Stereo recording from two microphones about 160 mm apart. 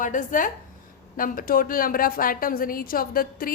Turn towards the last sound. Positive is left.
turn(degrees=65)  # may be behind; listen again after turning